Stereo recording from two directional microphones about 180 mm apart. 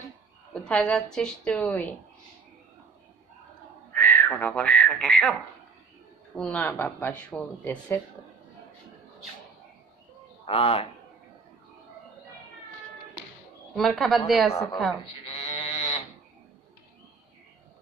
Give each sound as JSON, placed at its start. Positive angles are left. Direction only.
{"t": 0.5, "sound": "a sound", "side_deg": 5}
{"t": 1.1, "sound": "speech", "side_deg": 5}
{"t": 3.9, "sound": "speech", "side_deg": 10}
{"t": 10.4, "sound": "a man's voice", "side_deg": 30}
{"t": 13.7, "sound": "speech", "side_deg": 0}
{"t": 14.5, "sound": "speech", "side_deg": 15}
{"t": 15.2, "sound": "sheep", "side_deg": 25}